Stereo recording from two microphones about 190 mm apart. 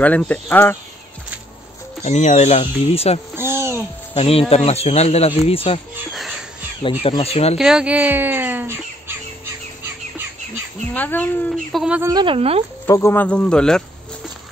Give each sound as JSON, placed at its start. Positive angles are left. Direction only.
{"t": 0.0, "sound": "speech", "side_deg": 5}
{"t": 2.0, "sound": "speech", "side_deg": 35}
{"t": 3.3, "sound": "a sound", "side_deg": -15}
{"t": 4.1, "sound": "speech", "side_deg": 30}
{"t": 6.8, "sound": "speech", "side_deg": 30}
{"t": 7.5, "sound": "crow", "side_deg": -5}
{"t": 10.9, "sound": "a woman's voice", "side_deg": 10}
{"t": 12.1, "sound": "speech", "side_deg": -25}
{"t": 12.8, "sound": "speech", "side_deg": 15}